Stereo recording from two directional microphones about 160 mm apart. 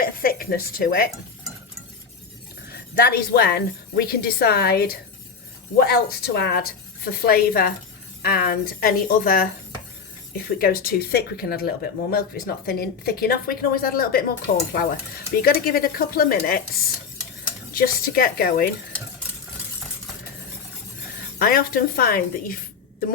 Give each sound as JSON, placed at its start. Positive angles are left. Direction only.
{"t": 0.0, "sound": "speech", "side_deg": 65}
{"t": 2.6, "sound": "speech", "side_deg": 75}
{"t": 5.8, "sound": "a woman's voice", "side_deg": 90}
{"t": 17.7, "sound": "speech", "side_deg": 65}
{"t": 21.3, "sound": "a woman's voice", "side_deg": 65}